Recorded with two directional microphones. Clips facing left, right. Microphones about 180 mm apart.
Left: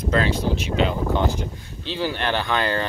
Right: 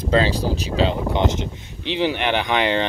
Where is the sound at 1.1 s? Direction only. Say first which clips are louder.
Right 2 dB; 20° right (ahead or behind).